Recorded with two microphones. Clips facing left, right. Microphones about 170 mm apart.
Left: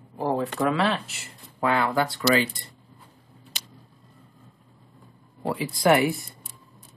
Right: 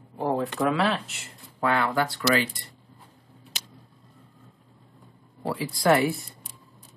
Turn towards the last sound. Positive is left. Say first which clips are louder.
# left 1 dB
turn(degrees=20)  # may be behind; listen again after turning